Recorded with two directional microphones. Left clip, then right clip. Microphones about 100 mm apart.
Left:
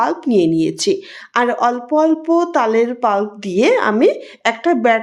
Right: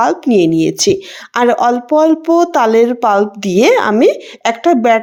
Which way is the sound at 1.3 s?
50° right (ahead or behind).